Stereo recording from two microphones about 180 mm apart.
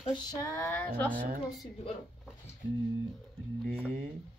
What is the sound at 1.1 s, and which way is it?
Speech, 45° right (ahead or behind).